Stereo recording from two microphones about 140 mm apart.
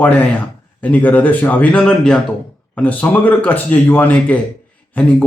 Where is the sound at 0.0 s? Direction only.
10° left (ahead or behind).